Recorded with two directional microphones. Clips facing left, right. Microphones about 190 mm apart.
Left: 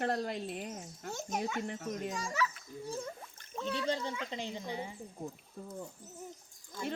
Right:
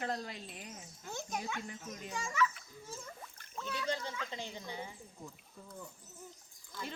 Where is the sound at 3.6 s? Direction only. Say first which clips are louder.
Left 4 dB; 25° left (ahead or behind).